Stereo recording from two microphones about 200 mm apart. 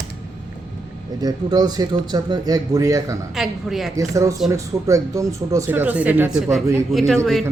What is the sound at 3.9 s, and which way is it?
A woman's voice, 15° right (ahead or behind).